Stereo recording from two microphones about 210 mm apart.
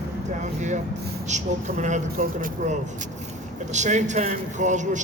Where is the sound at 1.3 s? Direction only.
35° right (ahead or behind).